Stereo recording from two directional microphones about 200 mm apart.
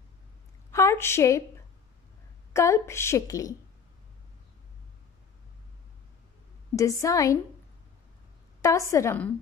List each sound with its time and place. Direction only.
0.7 s a sound: 15° left (ahead or behind)
2.5 s a woman's voice: 15° left (ahead or behind)
6.7 s a woman's voice: 15° left (ahead or behind)
8.6 s a woman's voice: 15° left (ahead or behind)